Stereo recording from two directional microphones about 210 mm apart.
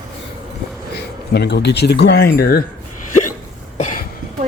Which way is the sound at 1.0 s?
50° left (ahead or behind).